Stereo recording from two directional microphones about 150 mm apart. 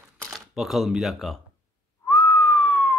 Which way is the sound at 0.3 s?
Centre (ahead or behind).